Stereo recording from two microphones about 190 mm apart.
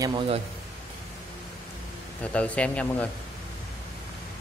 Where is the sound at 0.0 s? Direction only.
25° right (ahead or behind).